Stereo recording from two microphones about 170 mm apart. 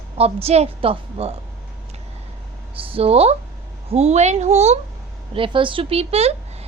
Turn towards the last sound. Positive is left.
turn(degrees=-35)  # may be behind; listen again after turning